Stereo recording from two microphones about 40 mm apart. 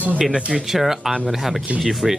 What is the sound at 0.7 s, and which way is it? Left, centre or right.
Speech, centre.